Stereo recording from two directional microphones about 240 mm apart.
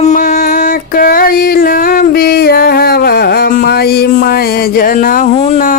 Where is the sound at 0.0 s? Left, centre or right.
Left.